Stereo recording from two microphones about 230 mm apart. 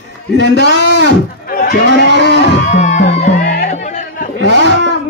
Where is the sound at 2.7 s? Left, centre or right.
Left.